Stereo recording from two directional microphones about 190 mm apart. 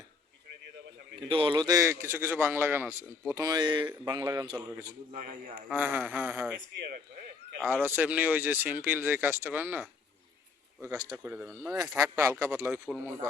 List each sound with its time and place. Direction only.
1.3 s a man's voice: 25° right (ahead or behind)
5.1 s speech: 30° right (ahead or behind)
5.7 s a man's voice: 10° right (ahead or behind)
6.7 s speech: 55° right (ahead or behind)
7.8 s a man's voice: 10° right (ahead or behind)